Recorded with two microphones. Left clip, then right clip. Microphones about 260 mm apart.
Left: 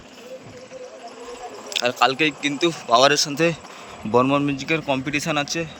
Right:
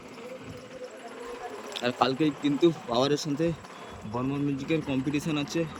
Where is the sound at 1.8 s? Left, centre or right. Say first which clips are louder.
Left 7 dB; centre.